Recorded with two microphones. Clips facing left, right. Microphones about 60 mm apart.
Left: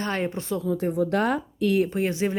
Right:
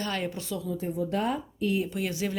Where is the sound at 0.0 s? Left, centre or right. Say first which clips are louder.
Left 4 dB; left.